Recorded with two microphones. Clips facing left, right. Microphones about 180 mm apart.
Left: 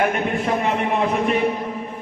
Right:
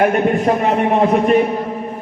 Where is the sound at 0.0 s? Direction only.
40° right (ahead or behind).